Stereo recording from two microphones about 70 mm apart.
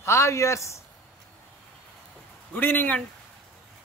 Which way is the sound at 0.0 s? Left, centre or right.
Left.